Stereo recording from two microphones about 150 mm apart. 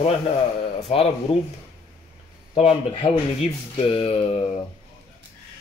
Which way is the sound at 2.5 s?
40° left (ahead or behind).